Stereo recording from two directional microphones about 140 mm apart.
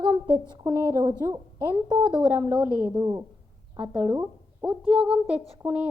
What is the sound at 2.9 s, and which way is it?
Speech, 25° right (ahead or behind).